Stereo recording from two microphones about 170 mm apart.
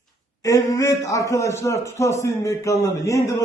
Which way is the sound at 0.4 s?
20° left (ahead or behind).